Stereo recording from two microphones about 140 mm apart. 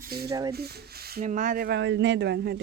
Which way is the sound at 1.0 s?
90° right.